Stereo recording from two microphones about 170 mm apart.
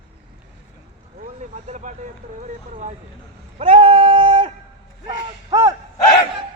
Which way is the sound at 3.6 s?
35° right (ahead or behind).